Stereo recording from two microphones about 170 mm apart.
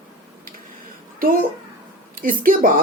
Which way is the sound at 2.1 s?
55° right (ahead or behind).